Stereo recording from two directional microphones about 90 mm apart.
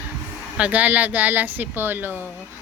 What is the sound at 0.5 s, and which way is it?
Speech, 15° right (ahead or behind).